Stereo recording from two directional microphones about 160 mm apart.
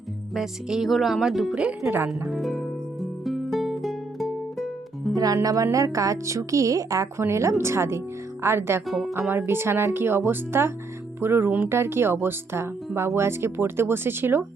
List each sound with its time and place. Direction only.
0.3 s speech: centre (ahead or behind)
2.0 s music: centre (ahead or behind)
5.1 s a woman's voice: 20° right (ahead or behind)
8.9 s speech: centre (ahead or behind)